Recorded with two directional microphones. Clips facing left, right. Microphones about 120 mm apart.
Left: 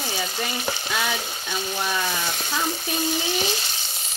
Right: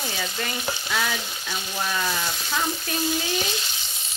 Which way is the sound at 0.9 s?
15° left (ahead or behind).